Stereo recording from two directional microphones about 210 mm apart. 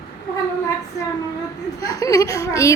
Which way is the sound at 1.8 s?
15° left (ahead or behind).